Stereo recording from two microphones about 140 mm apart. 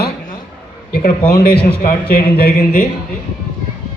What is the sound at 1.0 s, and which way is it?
Speech, 90° left.